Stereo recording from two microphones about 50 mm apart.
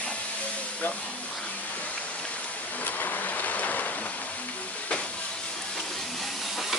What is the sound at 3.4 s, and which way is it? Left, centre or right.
Boat, left.